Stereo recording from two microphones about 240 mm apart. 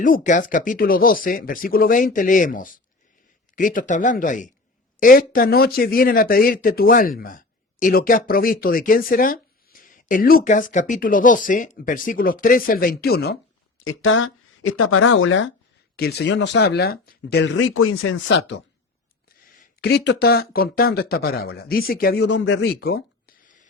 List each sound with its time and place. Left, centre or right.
0.0 s speech: left
13.7 s a sound: left
14.7 s speech: left
16.0 s speech: left